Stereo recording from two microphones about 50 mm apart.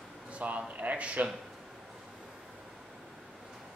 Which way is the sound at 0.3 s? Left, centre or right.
Right.